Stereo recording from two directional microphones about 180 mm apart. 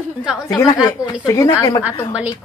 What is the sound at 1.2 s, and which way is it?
Speech, 15° left (ahead or behind).